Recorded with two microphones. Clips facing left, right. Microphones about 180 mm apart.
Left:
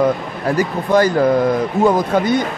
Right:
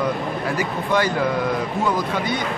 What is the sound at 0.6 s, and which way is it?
Speech, 40° left (ahead or behind).